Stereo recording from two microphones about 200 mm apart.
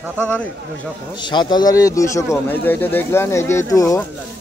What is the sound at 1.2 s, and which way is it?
Speech, 20° left (ahead or behind).